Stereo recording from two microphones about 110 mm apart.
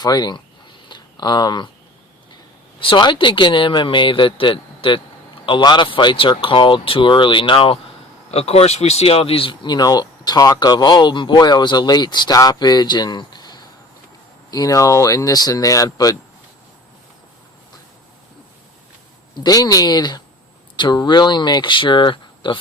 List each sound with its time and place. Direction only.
0.0 s speech: 40° left (ahead or behind)
0.9 s a sound: 40° left (ahead or behind)
2.8 s speech: 45° left (ahead or behind)
8.3 s speech: 70° left (ahead or behind); by 16.1 s 35° left (ahead or behind)
19.4 s speech: 35° left (ahead or behind)